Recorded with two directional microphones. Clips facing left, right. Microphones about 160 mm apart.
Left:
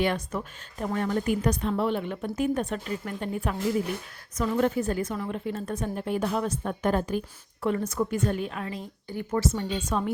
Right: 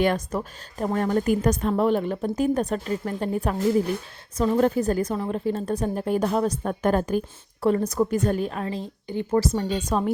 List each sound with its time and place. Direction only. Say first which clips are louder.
0.0 s a woman's voice: right 4 dB; 40° right (ahead or behind); by 9.4 s 25° right (ahead or behind)
9.4 s a woman's voice: right 3 dB; 35° right (ahead or behind)